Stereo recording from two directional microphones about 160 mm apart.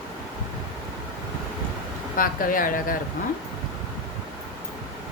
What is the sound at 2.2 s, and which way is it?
Speech, 60° left (ahead or behind).